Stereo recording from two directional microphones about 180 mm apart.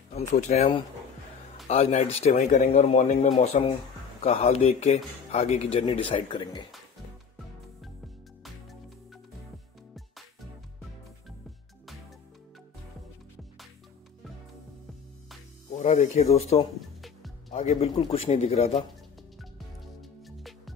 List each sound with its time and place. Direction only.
0.3 s a man's voice: 40° left (ahead or behind)
15.8 s a man's voice: 40° left (ahead or behind)
20.0 s music: centre (ahead or behind)